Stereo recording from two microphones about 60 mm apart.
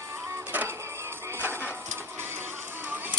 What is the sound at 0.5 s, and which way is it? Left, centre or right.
Printer, right.